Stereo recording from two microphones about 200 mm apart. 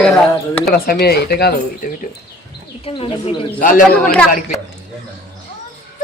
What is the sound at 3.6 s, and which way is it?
Speech, 40° left (ahead or behind).